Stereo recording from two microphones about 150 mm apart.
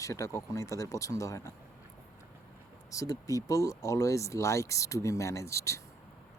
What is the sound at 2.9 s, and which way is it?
Speech, 20° left (ahead or behind).